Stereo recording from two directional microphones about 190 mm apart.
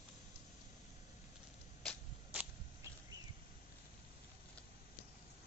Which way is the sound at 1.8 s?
5° left (ahead or behind).